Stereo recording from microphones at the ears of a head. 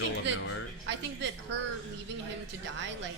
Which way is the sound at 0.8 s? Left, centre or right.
Right.